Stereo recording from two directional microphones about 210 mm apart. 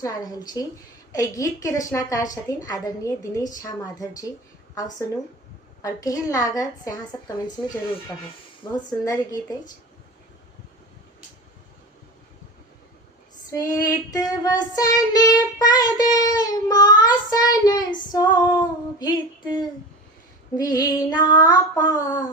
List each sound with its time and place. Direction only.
0.0 s female singing: 15° left (ahead or behind)
4.7 s speech: 15° left (ahead or behind)
5.8 s female singing: 15° left (ahead or behind)
13.5 s female singing: 15° left (ahead or behind)
20.6 s female singing: 20° left (ahead or behind)